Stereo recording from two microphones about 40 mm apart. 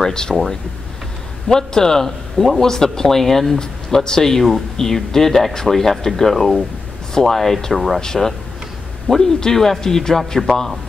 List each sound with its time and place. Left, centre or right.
0.0 s speech: centre
1.5 s speech: centre